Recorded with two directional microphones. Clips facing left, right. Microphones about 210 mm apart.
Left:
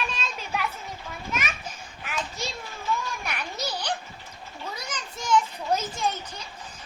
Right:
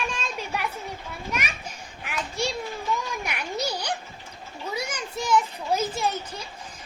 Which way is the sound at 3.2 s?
15° right (ahead or behind).